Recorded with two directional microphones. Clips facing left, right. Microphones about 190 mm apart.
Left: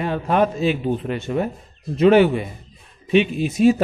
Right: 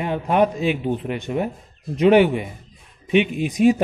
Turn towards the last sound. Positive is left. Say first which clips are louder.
# left 1 dB
turn(degrees=-15)  # may be behind; listen again after turning